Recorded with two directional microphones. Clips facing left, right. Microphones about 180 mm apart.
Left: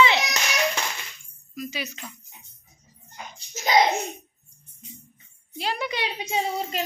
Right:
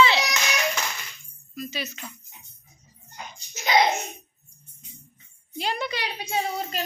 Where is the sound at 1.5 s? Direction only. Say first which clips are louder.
Even; 10° left (ahead or behind).